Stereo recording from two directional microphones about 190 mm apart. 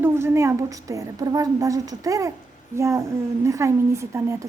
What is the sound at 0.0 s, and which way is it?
A woman's voice, 15° right (ahead or behind).